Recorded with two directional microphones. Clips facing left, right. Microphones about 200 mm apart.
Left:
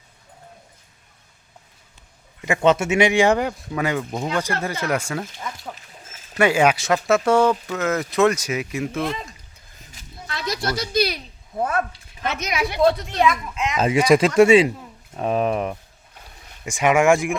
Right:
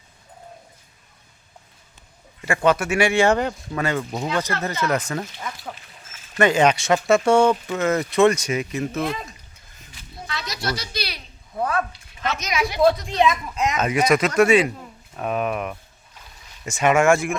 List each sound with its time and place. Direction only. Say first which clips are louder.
2.4 s speech: left 2 dB; 20° left (ahead or behind)
6.3 s speech: even; 10° left (ahead or behind)
9.9 s a sound: right 1 dB; 45° left (ahead or behind)
11.5 s speech: left 1 dB; 25° left (ahead or behind)
12.4 s a woman's voice: left 1 dB; 60° left (ahead or behind)
13.1 s speech: even; 15° right (ahead or behind)
13.7 s speech: left 4 dB; 30° left (ahead or behind)
16.6 s speech: left 1 dB; 15° left (ahead or behind)